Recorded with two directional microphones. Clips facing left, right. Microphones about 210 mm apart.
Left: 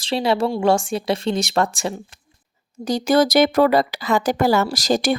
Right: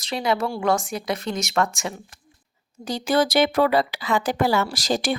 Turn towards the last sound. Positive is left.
turn(degrees=40)  # may be behind; listen again after turning